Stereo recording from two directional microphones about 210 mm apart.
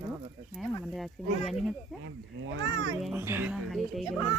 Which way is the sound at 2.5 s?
70° right (ahead or behind).